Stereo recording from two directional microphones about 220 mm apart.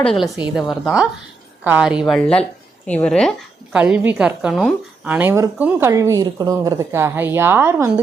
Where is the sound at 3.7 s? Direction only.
5° right (ahead or behind).